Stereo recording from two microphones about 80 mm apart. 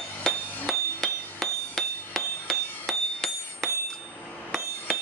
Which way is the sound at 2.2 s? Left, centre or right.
Centre.